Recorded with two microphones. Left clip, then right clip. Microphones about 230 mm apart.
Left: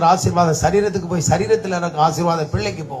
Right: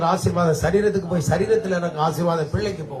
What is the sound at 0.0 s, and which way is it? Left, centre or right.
A man's voice, left.